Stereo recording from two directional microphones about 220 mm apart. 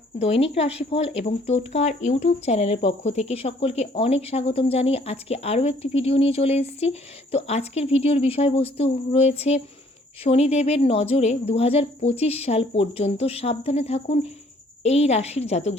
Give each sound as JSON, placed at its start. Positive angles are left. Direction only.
{"t": 0.2, "sound": "speech", "side_deg": 30}